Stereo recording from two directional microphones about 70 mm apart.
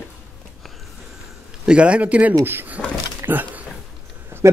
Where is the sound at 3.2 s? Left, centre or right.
Right.